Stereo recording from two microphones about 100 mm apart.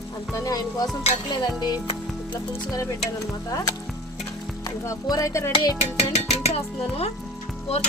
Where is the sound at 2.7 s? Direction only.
35° left (ahead or behind).